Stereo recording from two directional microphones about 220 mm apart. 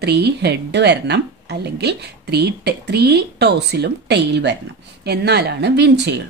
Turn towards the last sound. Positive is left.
turn(degrees=-50)  # may be behind; listen again after turning